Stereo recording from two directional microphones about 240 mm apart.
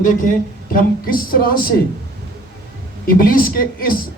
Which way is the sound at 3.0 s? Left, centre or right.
Left.